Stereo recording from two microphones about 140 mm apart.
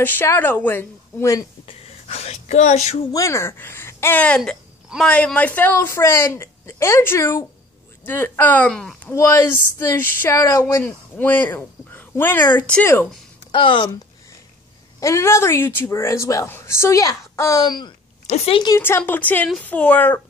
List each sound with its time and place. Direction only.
0.0 s speech: 15° left (ahead or behind)
1.7 s speech: 50° left (ahead or behind)
3.1 s speech: 20° left (ahead or behind)
4.4 s a sound: centre (ahead or behind)
5.1 s speech: 10° left (ahead or behind)
9.1 s speech: 20° left (ahead or behind)
13.5 s speech: 35° left (ahead or behind)
15.0 s speech: 20° left (ahead or behind)
18.2 s speech: 50° left (ahead or behind)
18.8 s speech: 15° left (ahead or behind)